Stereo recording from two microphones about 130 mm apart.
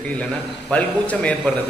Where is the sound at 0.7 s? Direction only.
10° left (ahead or behind).